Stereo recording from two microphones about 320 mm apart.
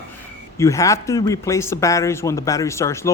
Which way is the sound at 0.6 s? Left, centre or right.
Centre.